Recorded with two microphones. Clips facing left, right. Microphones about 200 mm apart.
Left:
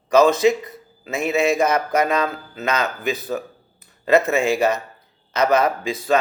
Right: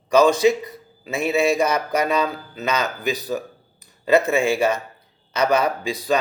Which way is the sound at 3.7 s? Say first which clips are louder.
Left 1 dB; 30° right (ahead or behind).